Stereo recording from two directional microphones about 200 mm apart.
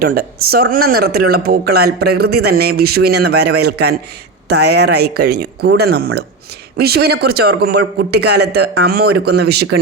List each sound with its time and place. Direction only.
0.0 s a man's voice: 50° right (ahead or behind)